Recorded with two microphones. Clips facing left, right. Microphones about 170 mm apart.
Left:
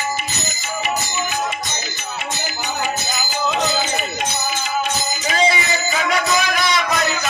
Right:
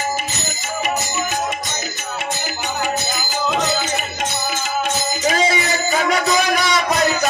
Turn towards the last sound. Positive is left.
turn(degrees=-40)  # may be behind; listen again after turning